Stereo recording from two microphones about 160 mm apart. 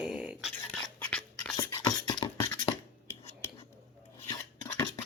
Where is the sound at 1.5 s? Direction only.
25° left (ahead or behind).